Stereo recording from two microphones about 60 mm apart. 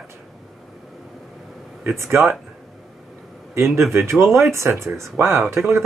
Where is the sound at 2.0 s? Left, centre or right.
Right.